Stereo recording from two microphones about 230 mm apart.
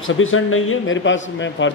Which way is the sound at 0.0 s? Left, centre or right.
Left.